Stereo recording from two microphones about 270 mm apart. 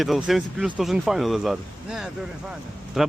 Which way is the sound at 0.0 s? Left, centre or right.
Centre.